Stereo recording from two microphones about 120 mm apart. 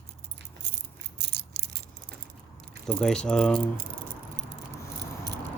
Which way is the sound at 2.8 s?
5° left (ahead or behind).